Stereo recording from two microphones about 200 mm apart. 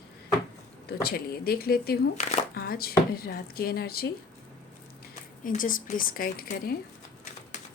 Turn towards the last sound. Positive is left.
turn(degrees=50)  # may be behind; listen again after turning